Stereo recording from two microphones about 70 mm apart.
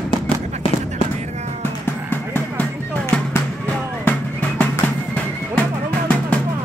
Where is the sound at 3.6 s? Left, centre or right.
Left.